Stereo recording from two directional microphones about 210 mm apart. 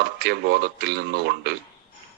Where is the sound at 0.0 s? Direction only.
50° right (ahead or behind).